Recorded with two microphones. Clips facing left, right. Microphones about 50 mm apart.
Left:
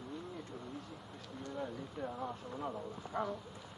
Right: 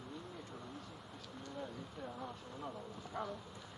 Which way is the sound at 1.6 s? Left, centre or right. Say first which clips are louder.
Left 5 dB; centre.